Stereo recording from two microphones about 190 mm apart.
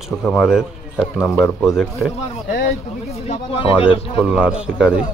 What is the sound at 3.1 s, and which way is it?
Speech, 30° left (ahead or behind).